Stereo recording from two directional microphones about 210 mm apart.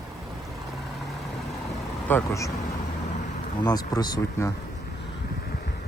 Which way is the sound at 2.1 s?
10° left (ahead or behind).